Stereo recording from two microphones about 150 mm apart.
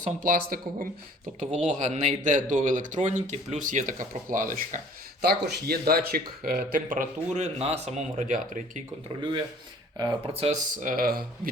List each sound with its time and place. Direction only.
0.2 s speech: 65° right (ahead or behind)
1.5 s speech: 50° right (ahead or behind)
5.2 s speech: 90° right; by 6.8 s 70° right (ahead or behind)
6.9 s speech: 55° right (ahead or behind)
10.0 s speech: 30° right (ahead or behind)
10.5 s speech: 60° right (ahead or behind)